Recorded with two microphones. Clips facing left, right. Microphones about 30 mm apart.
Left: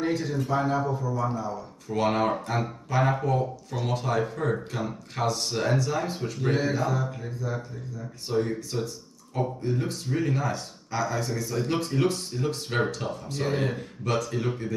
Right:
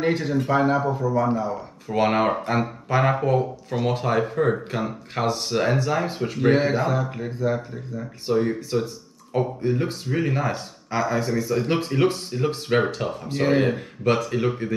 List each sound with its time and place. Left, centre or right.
0.0 s speech: right
8.3 s speech: right